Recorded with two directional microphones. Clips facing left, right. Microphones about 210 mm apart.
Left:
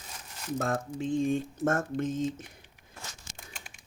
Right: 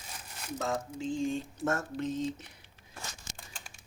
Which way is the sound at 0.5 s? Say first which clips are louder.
Left 3 dB; 55° left (ahead or behind).